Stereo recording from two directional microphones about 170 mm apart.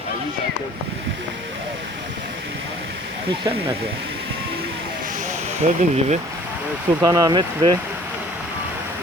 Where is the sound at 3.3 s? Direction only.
35° right (ahead or behind).